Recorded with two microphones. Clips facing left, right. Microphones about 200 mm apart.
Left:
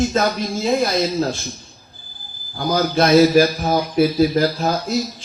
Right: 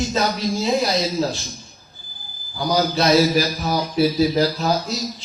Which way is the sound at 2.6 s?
50° left (ahead or behind).